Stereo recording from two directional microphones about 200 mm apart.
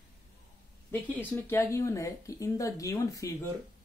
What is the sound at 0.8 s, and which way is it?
Speech, 10° left (ahead or behind).